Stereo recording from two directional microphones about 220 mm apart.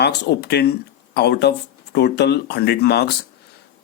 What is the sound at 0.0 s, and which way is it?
Speech, 50° left (ahead or behind).